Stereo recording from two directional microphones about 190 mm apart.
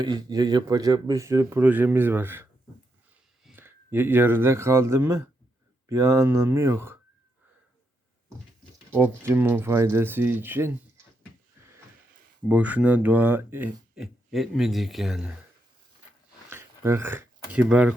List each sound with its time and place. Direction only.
0.0 s speech: 20° right (ahead or behind)
8.9 s speech: 10° right (ahead or behind)
12.5 s speech: 10° right (ahead or behind)
16.5 s a sound: 15° right (ahead or behind)